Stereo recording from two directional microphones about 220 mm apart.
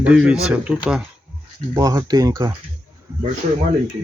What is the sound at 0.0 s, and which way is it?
Speech, 5° right (ahead or behind).